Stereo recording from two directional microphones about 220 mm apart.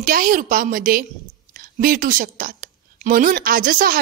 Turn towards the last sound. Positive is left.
turn(degrees=-40)  # may be behind; listen again after turning